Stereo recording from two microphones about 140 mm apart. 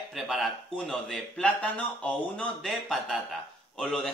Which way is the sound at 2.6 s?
Centre (ahead or behind).